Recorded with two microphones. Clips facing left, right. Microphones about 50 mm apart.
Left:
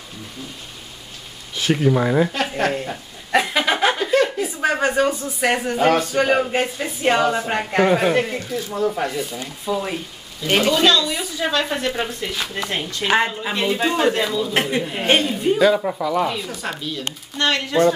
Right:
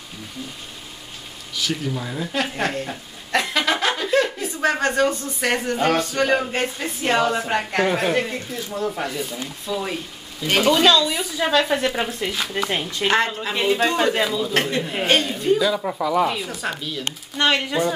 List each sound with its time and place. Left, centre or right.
1.5 s speech: left
2.3 s chuckle: centre
4.1 s speech: centre
9.7 s speech: centre
10.4 s speech: centre
13.1 s speech: centre
14.1 s speech: centre
14.5 s speech: centre
15.8 s speech: centre
17.4 s speech: centre